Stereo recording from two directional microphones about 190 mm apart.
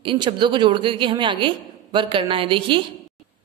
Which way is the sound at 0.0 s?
25° right (ahead or behind).